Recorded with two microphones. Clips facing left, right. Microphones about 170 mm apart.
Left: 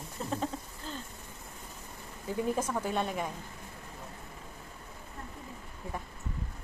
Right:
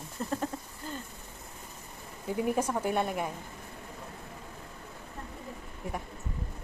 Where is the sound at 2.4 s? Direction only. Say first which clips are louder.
Right 3 dB; 10° right (ahead or behind).